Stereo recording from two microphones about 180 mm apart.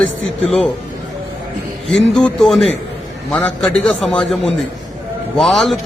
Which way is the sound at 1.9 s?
5° left (ahead or behind).